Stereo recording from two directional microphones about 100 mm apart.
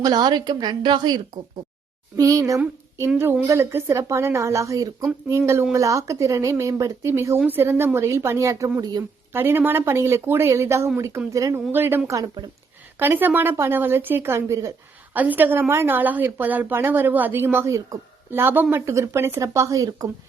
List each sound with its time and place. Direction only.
0.0 s a woman's voice: 45° right (ahead or behind)
2.1 s a woman's voice: 35° right (ahead or behind)
8.8 s speech: 40° right (ahead or behind)
9.3 s a woman's voice: 25° right (ahead or behind)
11.7 s a woman's voice: 20° right (ahead or behind)
15.1 s a woman's voice: 15° right (ahead or behind); by 17.9 s 30° right (ahead or behind)
18.3 s a woman's voice: 20° right (ahead or behind)